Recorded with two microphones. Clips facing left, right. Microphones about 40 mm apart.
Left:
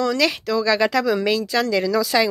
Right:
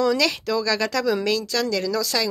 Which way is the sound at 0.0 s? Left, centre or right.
Centre.